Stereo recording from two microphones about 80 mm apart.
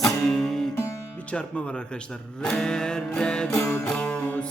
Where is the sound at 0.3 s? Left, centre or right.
Centre.